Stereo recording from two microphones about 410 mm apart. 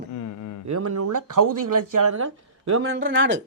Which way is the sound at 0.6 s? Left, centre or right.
Right.